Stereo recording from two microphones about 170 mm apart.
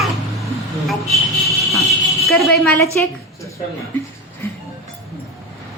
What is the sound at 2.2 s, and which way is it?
A woman's voice, 5° left (ahead or behind).